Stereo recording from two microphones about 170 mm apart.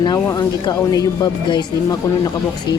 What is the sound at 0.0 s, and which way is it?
Speech, 25° left (ahead or behind).